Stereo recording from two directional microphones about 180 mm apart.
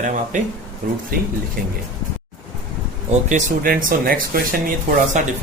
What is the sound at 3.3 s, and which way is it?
A man's voice, 50° right (ahead or behind).